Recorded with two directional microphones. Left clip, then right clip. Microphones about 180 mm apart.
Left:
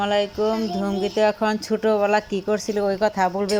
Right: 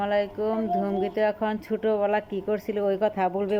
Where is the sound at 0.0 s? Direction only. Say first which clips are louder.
Left 4 dB; 10° left (ahead or behind).